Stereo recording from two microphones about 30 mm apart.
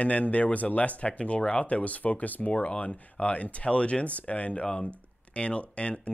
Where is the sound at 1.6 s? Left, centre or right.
Left.